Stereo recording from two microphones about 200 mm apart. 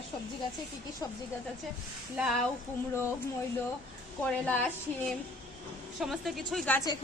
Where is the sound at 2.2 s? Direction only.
Centre (ahead or behind).